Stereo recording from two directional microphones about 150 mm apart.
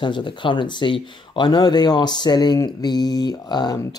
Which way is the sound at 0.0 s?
30° left (ahead or behind).